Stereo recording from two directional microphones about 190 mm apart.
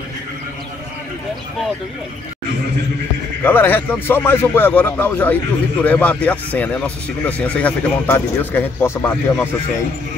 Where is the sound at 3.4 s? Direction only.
10° left (ahead or behind).